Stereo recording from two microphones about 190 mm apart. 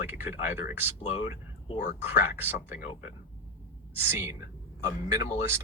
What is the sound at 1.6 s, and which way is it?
Speech, 35° left (ahead or behind).